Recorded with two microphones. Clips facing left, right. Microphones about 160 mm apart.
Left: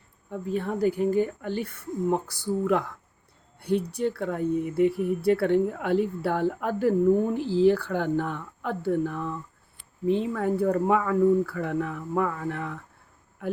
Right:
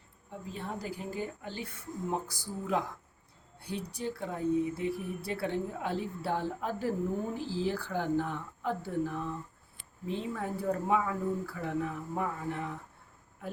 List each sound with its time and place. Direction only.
0.3 s speech: 60° left (ahead or behind)